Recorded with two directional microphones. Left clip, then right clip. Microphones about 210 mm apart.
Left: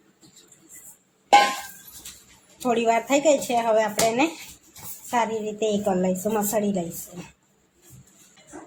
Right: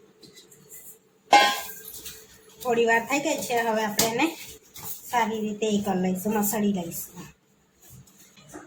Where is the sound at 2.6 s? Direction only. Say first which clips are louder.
Left 1 dB; 35° left (ahead or behind).